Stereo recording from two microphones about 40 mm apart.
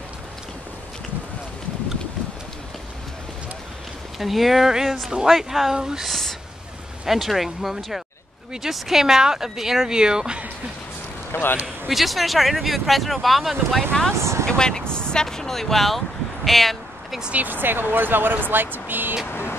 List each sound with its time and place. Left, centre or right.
4.2 s speech: centre
6.0 s speech: centre; by 10.4 s right
11.3 s speech: left
11.9 s speech: centre
13.9 s speech: centre
16.4 s a sound: centre
17.3 s speech: right